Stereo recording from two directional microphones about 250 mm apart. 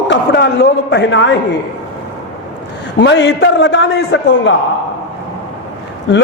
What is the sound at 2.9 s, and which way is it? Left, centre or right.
A man's voice, left.